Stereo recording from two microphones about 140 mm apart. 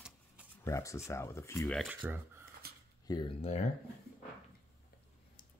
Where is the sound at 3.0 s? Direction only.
30° left (ahead or behind).